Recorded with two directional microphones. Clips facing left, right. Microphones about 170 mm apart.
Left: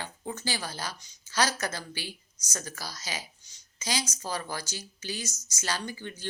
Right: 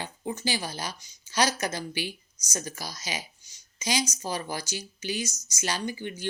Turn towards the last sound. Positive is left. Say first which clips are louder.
# right 5 dB
turn(degrees=-15)  # may be behind; listen again after turning